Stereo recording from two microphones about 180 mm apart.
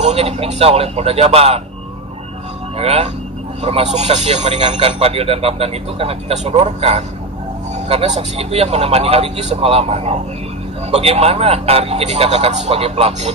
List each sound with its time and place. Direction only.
0.0 s speech: 35° right (ahead or behind)
2.8 s speech: 35° right (ahead or behind)